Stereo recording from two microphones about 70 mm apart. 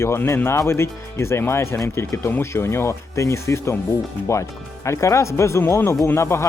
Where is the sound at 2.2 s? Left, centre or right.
Left.